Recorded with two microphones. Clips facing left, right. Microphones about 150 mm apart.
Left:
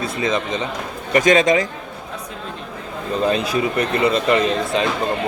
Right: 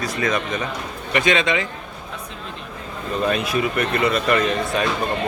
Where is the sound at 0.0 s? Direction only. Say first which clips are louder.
Left 1 dB; 25° left (ahead or behind).